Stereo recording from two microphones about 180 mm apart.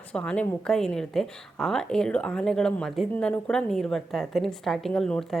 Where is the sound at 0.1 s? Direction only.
5° left (ahead or behind).